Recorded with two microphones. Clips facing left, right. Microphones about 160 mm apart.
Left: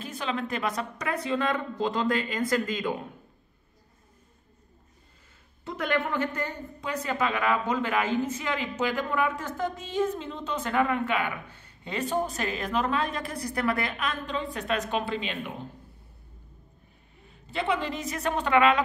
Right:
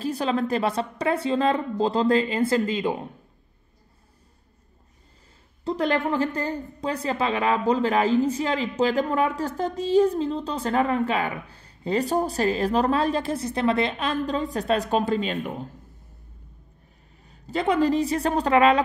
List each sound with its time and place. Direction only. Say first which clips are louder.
0.0 s a woman's voice: right 7 dB; 35° right (ahead or behind)
5.6 s a woman's voice: right 5 dB; 35° right (ahead or behind)
17.3 s a woman's voice: right 5 dB; 40° right (ahead or behind)